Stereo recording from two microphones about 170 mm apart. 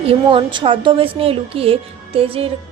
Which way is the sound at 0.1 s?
30° right (ahead or behind).